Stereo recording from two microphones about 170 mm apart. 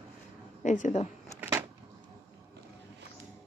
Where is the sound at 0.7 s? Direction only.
45° left (ahead or behind).